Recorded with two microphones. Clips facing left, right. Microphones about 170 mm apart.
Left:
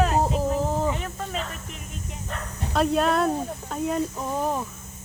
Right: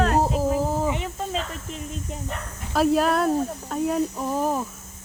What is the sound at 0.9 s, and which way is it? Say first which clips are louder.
Speech: right 3 dB; 15° right (ahead or behind).